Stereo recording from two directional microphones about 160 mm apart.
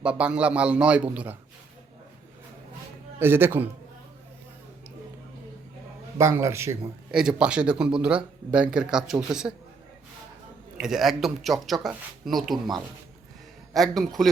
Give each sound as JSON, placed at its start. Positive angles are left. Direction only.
{"t": 0.0, "sound": "a man's voice", "side_deg": -5}
{"t": 3.2, "sound": "a man's voice", "side_deg": -15}
{"t": 6.1, "sound": "a man's voice", "side_deg": -15}
{"t": 7.1, "sound": "speech", "side_deg": -5}
{"t": 10.8, "sound": "speech", "side_deg": -5}